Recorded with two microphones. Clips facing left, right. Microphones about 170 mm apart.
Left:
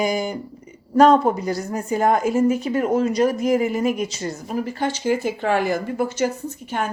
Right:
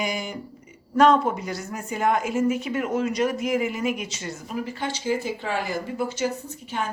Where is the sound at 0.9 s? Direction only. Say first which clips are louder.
Left 4 dB; 35° left (ahead or behind).